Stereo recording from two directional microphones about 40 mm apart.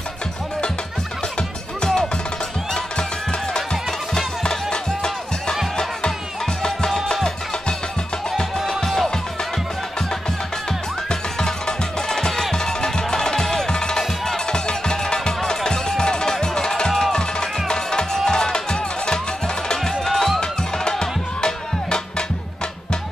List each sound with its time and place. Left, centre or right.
1.8 s music: centre
4.4 s music: centre
6.6 s music: centre
11.1 s music: centre